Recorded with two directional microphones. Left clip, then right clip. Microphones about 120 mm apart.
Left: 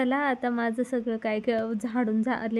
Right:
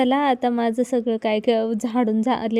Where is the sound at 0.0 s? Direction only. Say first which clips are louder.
Right 7 dB; 50° right (ahead or behind).